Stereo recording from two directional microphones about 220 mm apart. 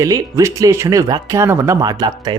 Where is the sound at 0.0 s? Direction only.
15° right (ahead or behind).